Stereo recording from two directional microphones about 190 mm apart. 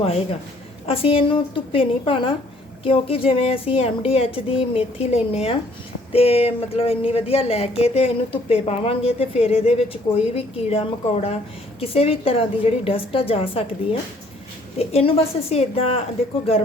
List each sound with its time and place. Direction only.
0.9 s a woman's voice: 30° left (ahead or behind)
14.8 s a woman's voice: 30° left (ahead or behind)